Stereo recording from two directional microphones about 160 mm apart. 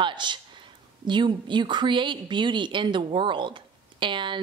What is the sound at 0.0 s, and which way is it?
A woman's voice, 30° right (ahead or behind).